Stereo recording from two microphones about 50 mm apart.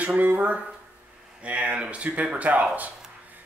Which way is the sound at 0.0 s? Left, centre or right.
Right.